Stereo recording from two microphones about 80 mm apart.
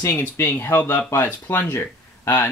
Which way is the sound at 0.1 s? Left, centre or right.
Left.